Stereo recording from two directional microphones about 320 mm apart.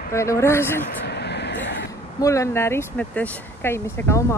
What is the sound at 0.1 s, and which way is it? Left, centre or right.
Speech, centre.